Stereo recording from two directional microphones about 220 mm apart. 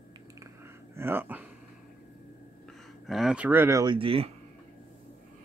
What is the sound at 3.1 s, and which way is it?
Speech, centre (ahead or behind).